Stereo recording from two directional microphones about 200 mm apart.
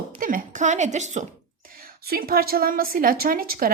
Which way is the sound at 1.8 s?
50° right (ahead or behind).